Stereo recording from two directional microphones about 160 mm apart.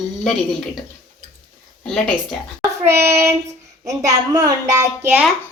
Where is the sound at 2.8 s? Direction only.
15° right (ahead or behind).